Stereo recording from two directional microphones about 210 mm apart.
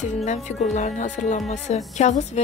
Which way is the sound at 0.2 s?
35° left (ahead or behind).